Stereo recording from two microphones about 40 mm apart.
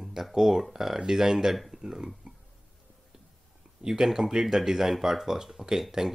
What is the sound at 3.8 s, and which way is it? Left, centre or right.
Speech, centre.